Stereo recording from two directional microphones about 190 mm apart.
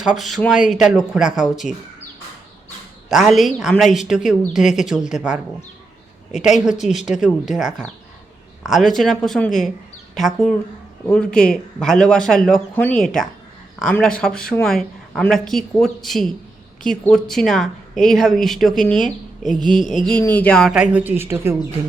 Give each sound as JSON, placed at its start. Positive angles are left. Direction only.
{"t": 0.0, "sound": "speech", "side_deg": 0}
{"t": 3.1, "sound": "speech", "side_deg": 0}
{"t": 6.4, "sound": "speech", "side_deg": 0}
{"t": 19.5, "sound": "a sound", "side_deg": 45}
{"t": 20.1, "sound": "speech", "side_deg": 10}